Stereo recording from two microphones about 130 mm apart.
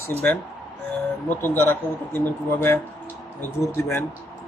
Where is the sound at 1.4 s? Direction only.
15° left (ahead or behind).